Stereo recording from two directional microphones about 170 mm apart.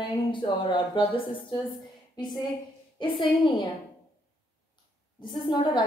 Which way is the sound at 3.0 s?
25° left (ahead or behind).